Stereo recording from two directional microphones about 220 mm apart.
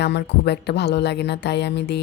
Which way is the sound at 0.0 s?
50° left (ahead or behind).